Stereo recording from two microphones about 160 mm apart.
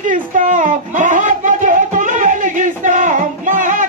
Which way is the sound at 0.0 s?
55° right (ahead or behind).